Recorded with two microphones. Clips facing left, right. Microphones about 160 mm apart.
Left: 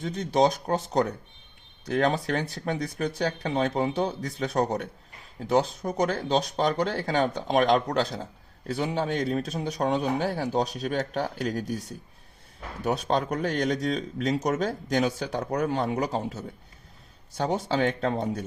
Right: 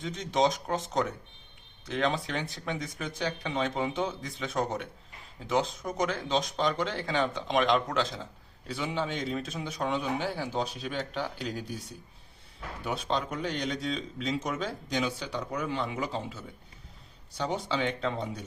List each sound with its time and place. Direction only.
0.0 s speech: 40° left (ahead or behind)
12.8 s speech: 40° left (ahead or behind)